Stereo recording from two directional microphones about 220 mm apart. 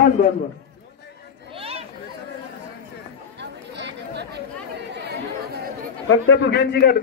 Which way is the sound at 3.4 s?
50° right (ahead or behind).